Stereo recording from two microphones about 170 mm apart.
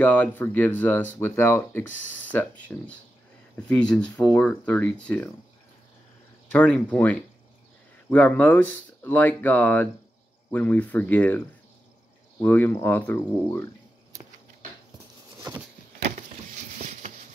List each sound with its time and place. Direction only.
0.0 s speech: 10° left (ahead or behind)
6.5 s speech: 10° left (ahead or behind)
16.7 s patter: 45° right (ahead or behind)